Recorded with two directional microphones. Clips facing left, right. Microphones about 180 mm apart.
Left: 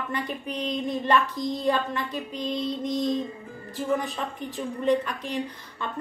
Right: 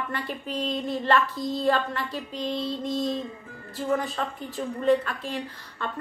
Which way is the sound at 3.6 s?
20° left (ahead or behind).